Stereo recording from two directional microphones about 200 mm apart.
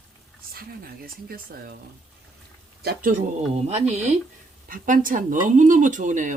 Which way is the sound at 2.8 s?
50° right (ahead or behind).